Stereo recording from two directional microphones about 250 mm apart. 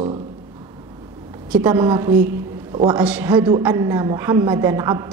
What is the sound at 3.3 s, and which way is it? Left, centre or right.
A woman's voice, centre.